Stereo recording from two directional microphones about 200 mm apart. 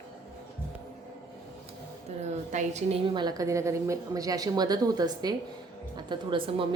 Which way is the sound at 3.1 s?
20° right (ahead or behind).